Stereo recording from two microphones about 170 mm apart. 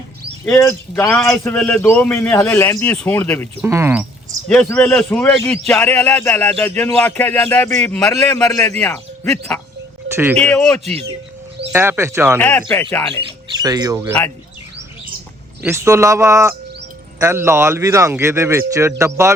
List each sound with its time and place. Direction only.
0.4 s a man's voice: 15° left (ahead or behind)
3.6 s speech: 15° right (ahead or behind)
4.4 s a man's voice: 5° left (ahead or behind)
10.1 s speech: 15° right (ahead or behind)
10.4 s a man's voice: 5° left (ahead or behind)
11.7 s speech: 15° right (ahead or behind)
12.4 s a man's voice: 10° left (ahead or behind)
13.6 s speech: 20° right (ahead or behind)
14.1 s a man's voice: 10° left (ahead or behind)
15.6 s speech: 15° right (ahead or behind)